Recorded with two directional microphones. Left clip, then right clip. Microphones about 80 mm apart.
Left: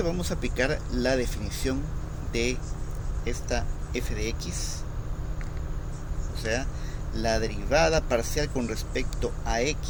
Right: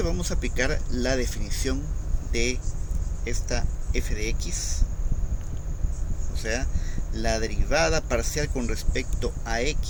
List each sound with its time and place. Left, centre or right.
0.0 s speech: centre
6.4 s speech: right